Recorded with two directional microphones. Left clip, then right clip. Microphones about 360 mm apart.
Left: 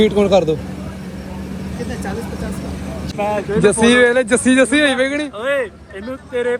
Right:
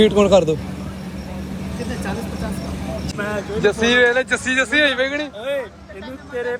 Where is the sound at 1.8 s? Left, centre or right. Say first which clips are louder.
Left 2 dB; centre.